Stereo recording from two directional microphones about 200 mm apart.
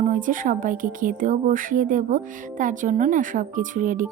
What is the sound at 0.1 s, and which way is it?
Music, 40° right (ahead or behind).